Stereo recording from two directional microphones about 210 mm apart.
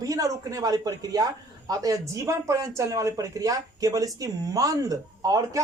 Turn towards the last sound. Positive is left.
turn(degrees=-15)  # may be behind; listen again after turning